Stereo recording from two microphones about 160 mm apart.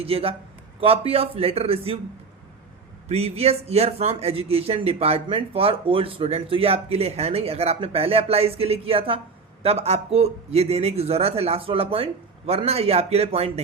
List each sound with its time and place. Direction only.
0.0 s a man's voice: 35° right (ahead or behind)
3.1 s a man's voice: 40° right (ahead or behind)